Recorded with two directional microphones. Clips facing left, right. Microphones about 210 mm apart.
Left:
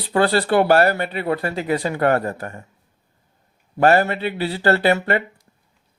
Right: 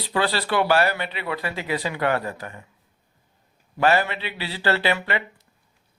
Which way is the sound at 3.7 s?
45° left (ahead or behind).